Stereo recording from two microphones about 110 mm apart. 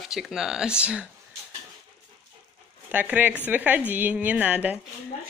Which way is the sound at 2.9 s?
15° right (ahead or behind).